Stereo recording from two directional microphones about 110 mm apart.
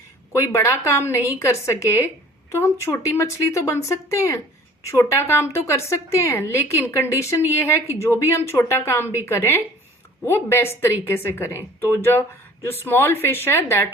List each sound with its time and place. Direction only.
0.3 s a woman's voice: 25° left (ahead or behind)